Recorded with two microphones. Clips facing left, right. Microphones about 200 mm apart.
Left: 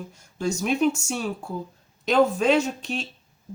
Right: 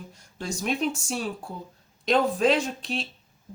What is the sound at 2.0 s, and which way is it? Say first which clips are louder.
Speech: left 2 dB; centre (ahead or behind).